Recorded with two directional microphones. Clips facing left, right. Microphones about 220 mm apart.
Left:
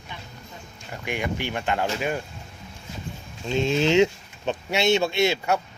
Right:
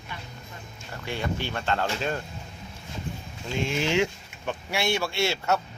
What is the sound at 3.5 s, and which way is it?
Speech, 20° left (ahead or behind).